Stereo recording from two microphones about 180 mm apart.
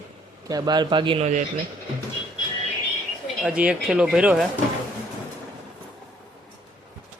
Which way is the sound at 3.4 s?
5° right (ahead or behind).